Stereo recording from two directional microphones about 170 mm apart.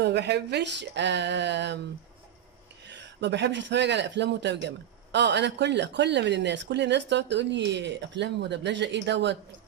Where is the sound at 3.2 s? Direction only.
90° right.